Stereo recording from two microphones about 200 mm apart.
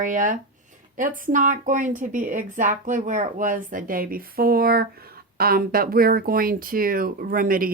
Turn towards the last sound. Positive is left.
turn(degrees=-45)  # may be behind; listen again after turning